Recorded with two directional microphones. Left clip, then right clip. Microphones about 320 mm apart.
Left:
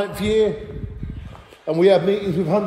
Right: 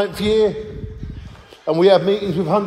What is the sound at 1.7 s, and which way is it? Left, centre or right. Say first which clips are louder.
Speech: right 2 dB; centre.